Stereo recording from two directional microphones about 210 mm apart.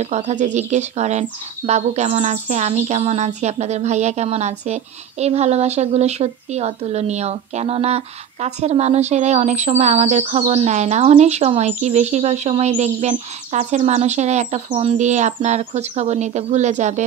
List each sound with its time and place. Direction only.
0.0 s speech: 30° right (ahead or behind)